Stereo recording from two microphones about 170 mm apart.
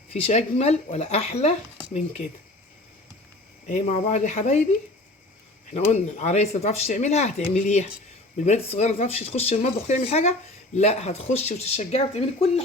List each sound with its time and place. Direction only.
0.1 s speech: 40° left (ahead or behind)
3.7 s speech: 45° left (ahead or behind)
5.7 s speech: 40° left (ahead or behind)